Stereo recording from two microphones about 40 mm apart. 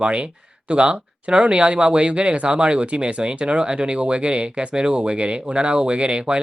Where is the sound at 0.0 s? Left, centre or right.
Right.